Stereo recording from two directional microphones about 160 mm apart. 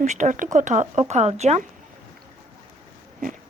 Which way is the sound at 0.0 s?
50° right (ahead or behind).